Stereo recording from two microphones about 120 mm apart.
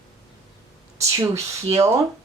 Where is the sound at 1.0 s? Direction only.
25° right (ahead or behind).